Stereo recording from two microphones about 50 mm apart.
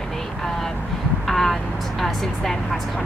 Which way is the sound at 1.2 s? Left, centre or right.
Centre.